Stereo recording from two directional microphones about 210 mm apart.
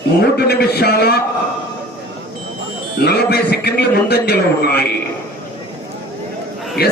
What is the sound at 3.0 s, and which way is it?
A man's voice, 50° left (ahead or behind).